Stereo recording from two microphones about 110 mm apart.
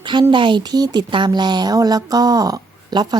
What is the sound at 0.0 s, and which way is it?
A woman's voice, 45° right (ahead or behind).